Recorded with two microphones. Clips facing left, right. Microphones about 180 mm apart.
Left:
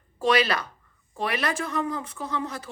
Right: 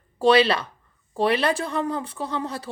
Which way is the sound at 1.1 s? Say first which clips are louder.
Right 6 dB; 30° right (ahead or behind).